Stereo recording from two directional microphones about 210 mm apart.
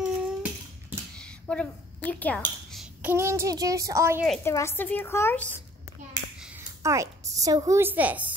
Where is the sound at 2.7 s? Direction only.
5° right (ahead or behind).